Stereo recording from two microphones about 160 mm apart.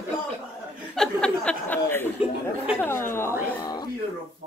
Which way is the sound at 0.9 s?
5° left (ahead or behind).